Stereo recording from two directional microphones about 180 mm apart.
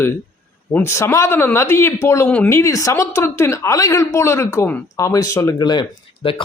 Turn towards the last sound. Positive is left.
turn(degrees=30)  # may be behind; listen again after turning